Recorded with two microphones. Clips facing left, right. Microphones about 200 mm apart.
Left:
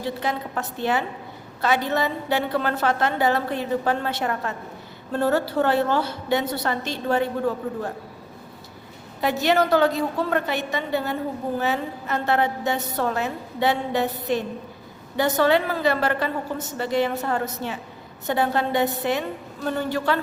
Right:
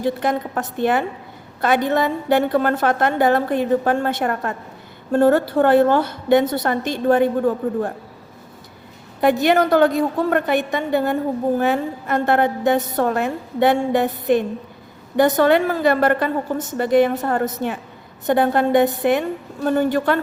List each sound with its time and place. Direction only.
0.0 s a woman's voice: 50° right (ahead or behind)
9.2 s a woman's voice: 50° right (ahead or behind)